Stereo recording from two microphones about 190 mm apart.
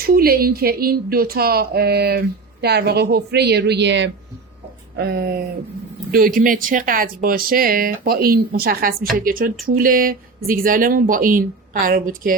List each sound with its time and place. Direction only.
0.0 s speech: 50° right (ahead or behind)